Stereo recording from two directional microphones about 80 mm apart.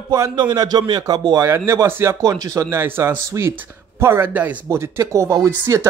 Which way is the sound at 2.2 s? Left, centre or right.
Right.